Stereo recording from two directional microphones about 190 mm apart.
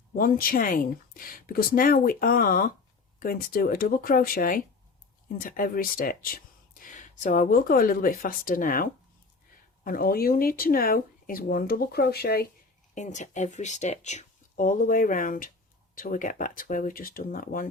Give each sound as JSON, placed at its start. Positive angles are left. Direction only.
{"t": 0.2, "sound": "speech", "side_deg": 50}
{"t": 12.9, "sound": "speech", "side_deg": 40}